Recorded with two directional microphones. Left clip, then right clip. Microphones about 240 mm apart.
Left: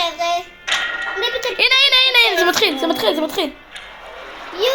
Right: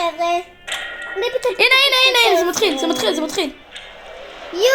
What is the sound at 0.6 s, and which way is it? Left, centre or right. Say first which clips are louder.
Music: left 6 dB; centre.